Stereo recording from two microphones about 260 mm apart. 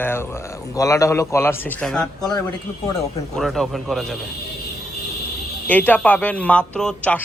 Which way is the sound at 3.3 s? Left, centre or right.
Centre.